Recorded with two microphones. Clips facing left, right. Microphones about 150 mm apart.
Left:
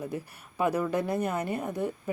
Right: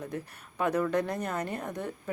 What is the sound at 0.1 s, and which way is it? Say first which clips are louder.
Speech: left 2 dB; 5° left (ahead or behind).